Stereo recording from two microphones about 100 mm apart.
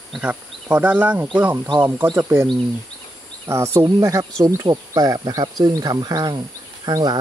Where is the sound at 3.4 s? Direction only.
25° right (ahead or behind).